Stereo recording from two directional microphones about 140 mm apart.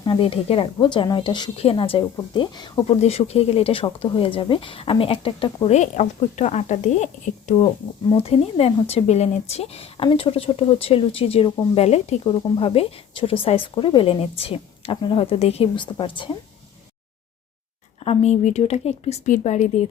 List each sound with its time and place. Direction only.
0.0 s a woman's voice: 35° left (ahead or behind)
2.8 s a woman's voice: 45° left (ahead or behind)
5.6 s speech: 55° left (ahead or behind)
8.1 s speech: 45° left (ahead or behind)
12.2 s a woman's voice: 40° left (ahead or behind)
18.0 s speech: 45° left (ahead or behind)